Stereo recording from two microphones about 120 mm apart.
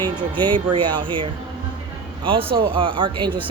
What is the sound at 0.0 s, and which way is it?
A woman's voice, 45° right (ahead or behind).